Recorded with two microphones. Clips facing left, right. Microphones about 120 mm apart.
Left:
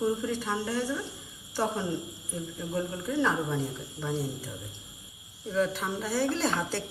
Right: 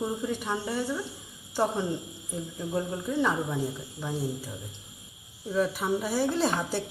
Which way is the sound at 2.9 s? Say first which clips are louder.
Even; 15° right (ahead or behind).